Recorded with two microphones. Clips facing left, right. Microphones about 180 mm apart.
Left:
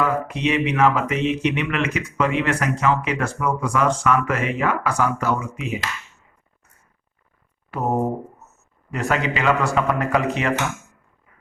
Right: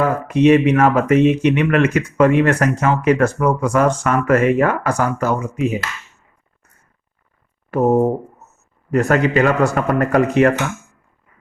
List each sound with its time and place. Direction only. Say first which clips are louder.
0.0 s speech: right 7 dB; 45° right (ahead or behind)
7.7 s speech: right 9 dB; 45° right (ahead or behind)
8.9 s speech: right 8 dB; 45° right (ahead or behind)